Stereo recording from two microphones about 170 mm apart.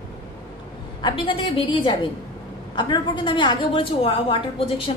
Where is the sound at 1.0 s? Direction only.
30° left (ahead or behind).